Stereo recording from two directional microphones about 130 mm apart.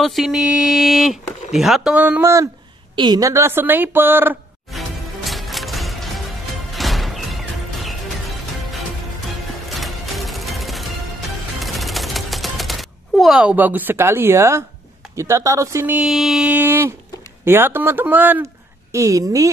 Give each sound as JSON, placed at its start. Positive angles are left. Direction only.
{"t": 0.0, "sound": "speech", "side_deg": 0}
{"t": 2.0, "sound": "a woman's voice", "side_deg": -10}
{"t": 2.2, "sound": "a woman's voice", "side_deg": -25}
{"t": 4.7, "sound": "music", "side_deg": 0}
{"t": 9.7, "sound": "music", "side_deg": 0}
{"t": 11.6, "sound": "typewriter", "side_deg": 0}
{"t": 15.1, "sound": "speech", "side_deg": -25}
{"t": 16.0, "sound": "a woman's voice", "side_deg": 0}